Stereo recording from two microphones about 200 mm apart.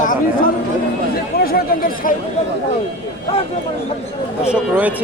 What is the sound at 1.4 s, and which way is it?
Speech, 45° left (ahead or behind).